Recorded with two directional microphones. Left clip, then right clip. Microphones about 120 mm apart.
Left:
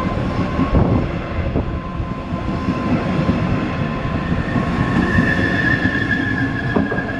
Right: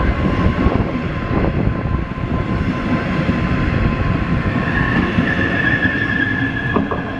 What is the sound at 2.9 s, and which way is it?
Vehicle, 20° right (ahead or behind).